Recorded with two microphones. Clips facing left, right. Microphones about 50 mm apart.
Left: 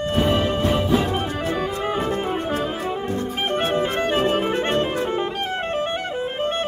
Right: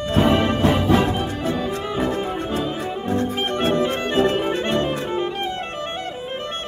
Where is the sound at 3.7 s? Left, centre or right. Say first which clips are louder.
Right 1 dB; left.